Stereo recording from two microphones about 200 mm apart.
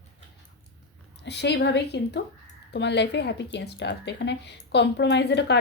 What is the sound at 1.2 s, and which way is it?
Speech, 55° left (ahead or behind).